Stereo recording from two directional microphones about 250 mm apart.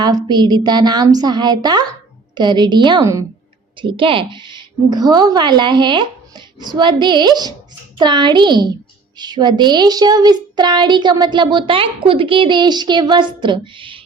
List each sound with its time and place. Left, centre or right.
0.3 s speech: centre